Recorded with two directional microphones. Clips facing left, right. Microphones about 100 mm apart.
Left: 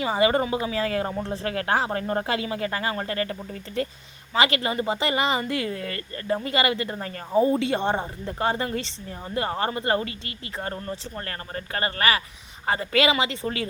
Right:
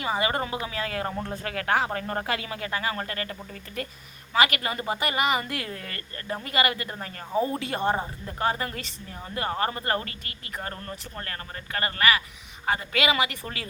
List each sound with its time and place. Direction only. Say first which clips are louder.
0.0 s speech: left 5 dB; 25° left (ahead or behind)
2.9 s speech: left 3 dB; 20° left (ahead or behind)
3.2 s speech: left 6 dB; 30° left (ahead or behind)